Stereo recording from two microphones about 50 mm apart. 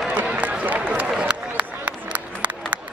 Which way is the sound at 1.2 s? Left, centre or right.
Right.